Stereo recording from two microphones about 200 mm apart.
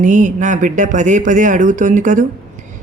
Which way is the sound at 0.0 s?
40° right (ahead or behind).